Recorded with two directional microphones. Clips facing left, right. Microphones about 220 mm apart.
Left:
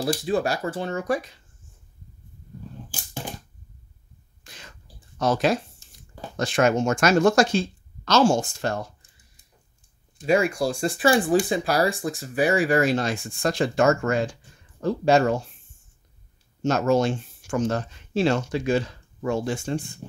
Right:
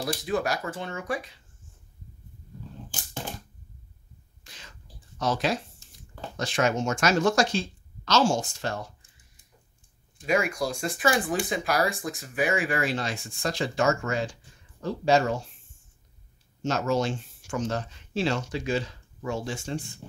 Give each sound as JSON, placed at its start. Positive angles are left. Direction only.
{"t": 0.0, "sound": "speech", "side_deg": 30}
{"t": 5.2, "sound": "speech", "side_deg": 50}
{"t": 10.1, "sound": "speech", "side_deg": 30}
{"t": 16.6, "sound": "speech", "side_deg": 50}